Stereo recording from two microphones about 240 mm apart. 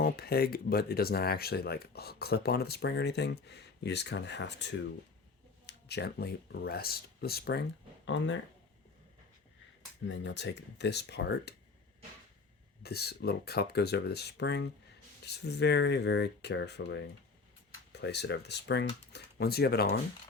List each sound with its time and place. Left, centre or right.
0.0 s speech: left
10.1 s speech: left
12.8 s speech: left